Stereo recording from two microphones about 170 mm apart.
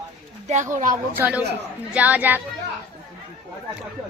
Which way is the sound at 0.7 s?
50° right (ahead or behind).